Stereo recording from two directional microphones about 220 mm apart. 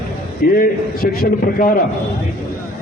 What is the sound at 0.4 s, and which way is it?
A man's voice, 40° left (ahead or behind).